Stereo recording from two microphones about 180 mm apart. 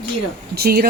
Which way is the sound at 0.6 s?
60° right (ahead or behind).